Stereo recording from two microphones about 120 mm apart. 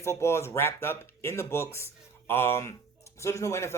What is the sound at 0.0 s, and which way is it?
Speech, 25° left (ahead or behind).